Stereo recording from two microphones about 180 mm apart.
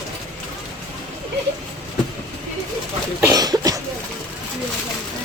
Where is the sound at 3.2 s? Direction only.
20° right (ahead or behind).